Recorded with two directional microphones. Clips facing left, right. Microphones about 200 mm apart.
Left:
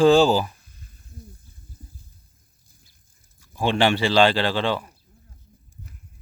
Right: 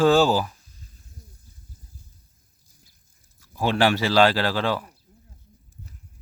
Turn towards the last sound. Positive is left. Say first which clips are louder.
# left 1 dB
turn(degrees=-5)  # may be behind; listen again after turning